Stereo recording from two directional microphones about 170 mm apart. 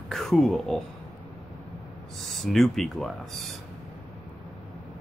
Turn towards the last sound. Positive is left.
turn(degrees=0)  # may be behind; listen again after turning